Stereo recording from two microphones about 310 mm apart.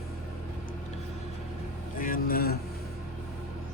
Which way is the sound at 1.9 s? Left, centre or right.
Left.